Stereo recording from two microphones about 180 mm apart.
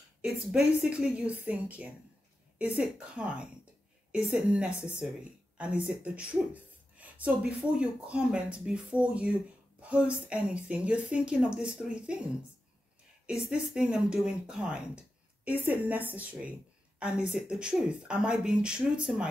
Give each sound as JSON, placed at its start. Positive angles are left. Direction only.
{"t": 0.2, "sound": "a woman's voice", "side_deg": -5}
{"t": 13.3, "sound": "speech", "side_deg": -5}